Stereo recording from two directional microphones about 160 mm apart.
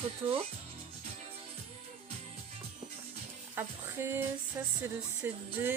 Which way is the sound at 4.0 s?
15° right (ahead or behind).